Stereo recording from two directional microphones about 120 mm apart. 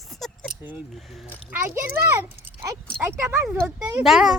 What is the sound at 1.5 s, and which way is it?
A child's voice, 20° right (ahead or behind).